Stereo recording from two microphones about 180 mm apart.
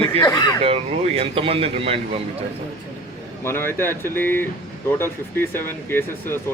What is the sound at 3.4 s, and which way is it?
Speech, 15° left (ahead or behind).